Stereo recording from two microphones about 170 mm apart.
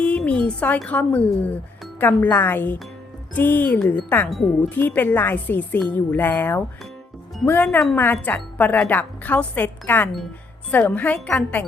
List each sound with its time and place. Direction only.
0.0 s speech: 10° left (ahead or behind)
4.8 s speech: 10° left (ahead or behind)